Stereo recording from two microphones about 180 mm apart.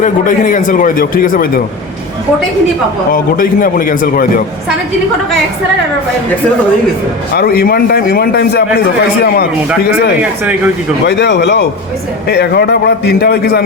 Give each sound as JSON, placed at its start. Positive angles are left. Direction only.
{"t": 0.0, "sound": "a man's voice", "side_deg": 45}
{"t": 3.1, "sound": "a man's voice", "side_deg": 50}
{"t": 7.3, "sound": "a man's voice", "side_deg": 60}
{"t": 11.0, "sound": "a man's voice", "side_deg": 75}